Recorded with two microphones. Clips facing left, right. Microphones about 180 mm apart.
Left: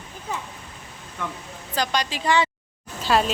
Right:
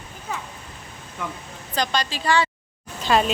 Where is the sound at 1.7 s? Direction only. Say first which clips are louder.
Even; 10° left (ahead or behind).